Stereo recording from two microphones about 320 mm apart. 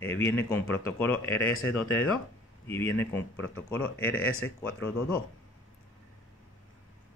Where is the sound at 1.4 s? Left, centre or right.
Left.